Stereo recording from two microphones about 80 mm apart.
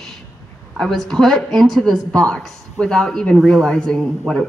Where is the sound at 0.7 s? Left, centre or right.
Centre.